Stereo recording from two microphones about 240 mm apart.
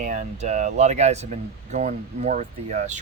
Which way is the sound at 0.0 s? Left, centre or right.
Right.